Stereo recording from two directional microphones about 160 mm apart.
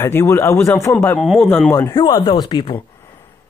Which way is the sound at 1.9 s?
30° left (ahead or behind).